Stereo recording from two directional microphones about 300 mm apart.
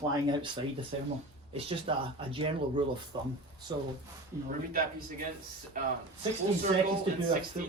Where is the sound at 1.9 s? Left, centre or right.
Centre.